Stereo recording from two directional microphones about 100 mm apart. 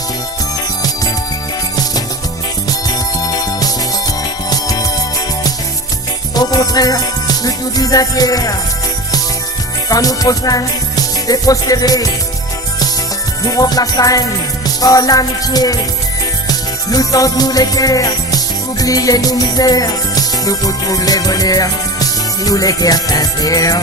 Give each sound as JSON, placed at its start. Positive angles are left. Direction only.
{"t": 3.2, "sound": "music", "side_deg": 40}
{"t": 6.3, "sound": "music", "side_deg": 40}
{"t": 9.9, "sound": "music", "side_deg": 40}
{"t": 13.4, "sound": "music", "side_deg": 40}